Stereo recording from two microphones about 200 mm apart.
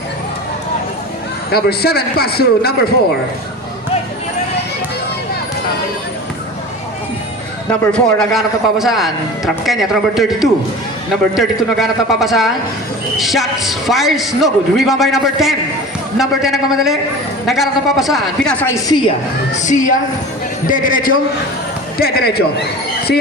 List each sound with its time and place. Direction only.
1.5 s a man's voice: 50° left (ahead or behind)
7.7 s a man's voice: 5° left (ahead or behind)
10.2 s a man's voice: centre (ahead or behind)
19.5 s a woman's voice: 40° left (ahead or behind)